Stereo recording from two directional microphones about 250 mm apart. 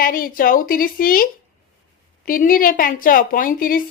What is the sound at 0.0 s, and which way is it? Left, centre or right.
A woman's voice, left.